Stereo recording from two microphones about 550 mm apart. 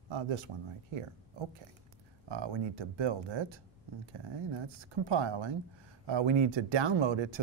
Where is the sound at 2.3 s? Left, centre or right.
Right.